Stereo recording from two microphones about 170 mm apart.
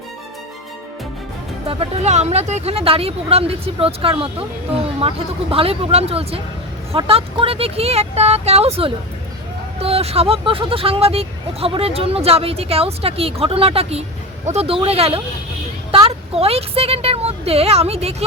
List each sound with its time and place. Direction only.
1.6 s speech: 35° right (ahead or behind)